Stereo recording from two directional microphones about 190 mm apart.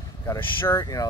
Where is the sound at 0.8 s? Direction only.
20° left (ahead or behind).